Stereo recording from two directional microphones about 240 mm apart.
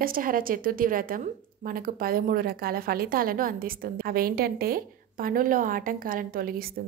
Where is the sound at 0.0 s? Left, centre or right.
Right.